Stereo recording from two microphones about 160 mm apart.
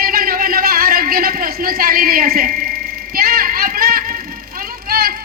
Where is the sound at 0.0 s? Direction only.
65° right (ahead or behind).